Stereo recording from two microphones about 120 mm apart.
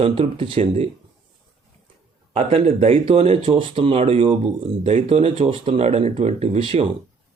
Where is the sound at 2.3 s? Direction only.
55° right (ahead or behind).